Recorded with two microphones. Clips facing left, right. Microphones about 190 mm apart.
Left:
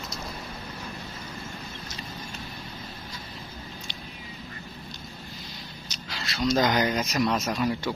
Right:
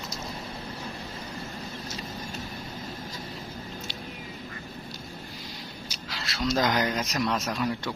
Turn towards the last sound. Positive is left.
turn(degrees=0)  # may be behind; listen again after turning